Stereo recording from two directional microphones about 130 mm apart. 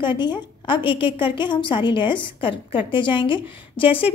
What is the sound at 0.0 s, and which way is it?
A woman's voice, 35° left (ahead or behind).